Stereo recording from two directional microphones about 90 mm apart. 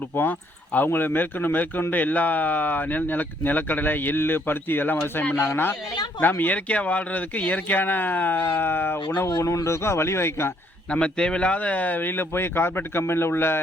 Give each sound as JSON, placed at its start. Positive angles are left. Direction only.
{"t": 0.2, "sound": "speech", "side_deg": 20}
{"t": 9.4, "sound": "speech", "side_deg": 35}
{"t": 10.9, "sound": "speech", "side_deg": 10}